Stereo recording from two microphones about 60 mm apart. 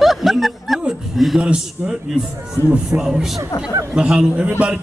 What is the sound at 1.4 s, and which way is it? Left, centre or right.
Speech, centre.